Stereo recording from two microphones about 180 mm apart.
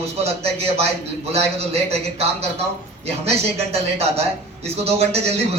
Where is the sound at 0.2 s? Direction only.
35° right (ahead or behind).